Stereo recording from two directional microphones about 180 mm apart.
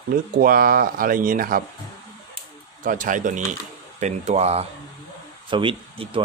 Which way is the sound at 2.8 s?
45° right (ahead or behind).